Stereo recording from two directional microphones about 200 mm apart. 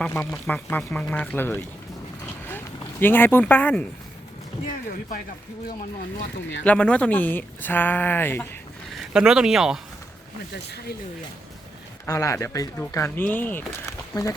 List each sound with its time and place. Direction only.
0.0 s speech: 10° left (ahead or behind)
3.0 s speech: 10° left (ahead or behind)
4.9 s speech: 45° left (ahead or behind)
6.7 s speech: 5° left (ahead or behind)
9.1 s speech: 5° right (ahead or behind)
10.5 s speech: 55° left (ahead or behind)
12.0 s speech: 15° left (ahead or behind)